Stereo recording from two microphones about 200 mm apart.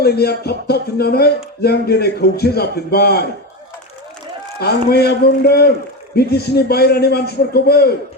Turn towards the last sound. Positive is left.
turn(degrees=50)  # may be behind; listen again after turning